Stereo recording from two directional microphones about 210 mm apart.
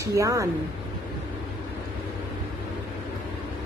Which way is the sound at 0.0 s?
15° right (ahead or behind).